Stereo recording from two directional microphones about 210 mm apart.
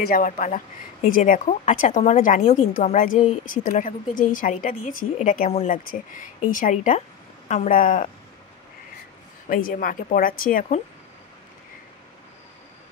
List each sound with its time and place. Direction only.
0.0 s a woman's voice: 40° left (ahead or behind)
9.5 s a woman's voice: 40° left (ahead or behind)